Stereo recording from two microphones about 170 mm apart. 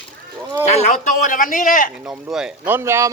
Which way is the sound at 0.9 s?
50° left (ahead or behind).